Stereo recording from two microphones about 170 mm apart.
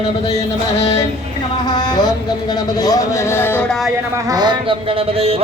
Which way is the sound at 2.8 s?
20° left (ahead or behind).